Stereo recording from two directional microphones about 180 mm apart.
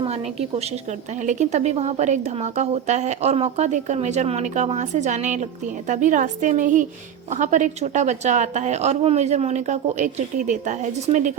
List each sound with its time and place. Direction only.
0.0 s a woman's voice: 35° right (ahead or behind)